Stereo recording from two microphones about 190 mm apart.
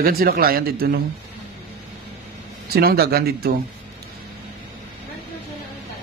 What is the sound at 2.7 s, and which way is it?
Speech, 55° right (ahead or behind).